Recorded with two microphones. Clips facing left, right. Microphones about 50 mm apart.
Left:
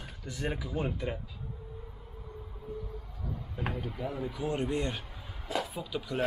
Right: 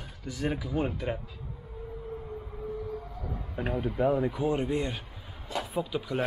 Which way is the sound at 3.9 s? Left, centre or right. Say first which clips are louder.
Right 10 dB; right.